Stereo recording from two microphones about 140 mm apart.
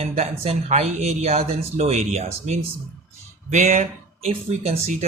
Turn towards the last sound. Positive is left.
turn(degrees=-55)  # may be behind; listen again after turning